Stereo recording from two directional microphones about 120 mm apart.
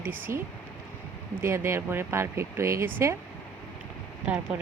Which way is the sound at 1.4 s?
20° right (ahead or behind).